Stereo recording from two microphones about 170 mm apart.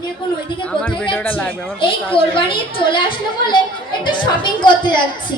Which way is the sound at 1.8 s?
30° left (ahead or behind).